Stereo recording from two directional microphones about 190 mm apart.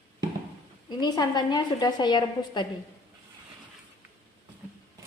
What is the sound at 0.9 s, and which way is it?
A woman's voice, 20° left (ahead or behind).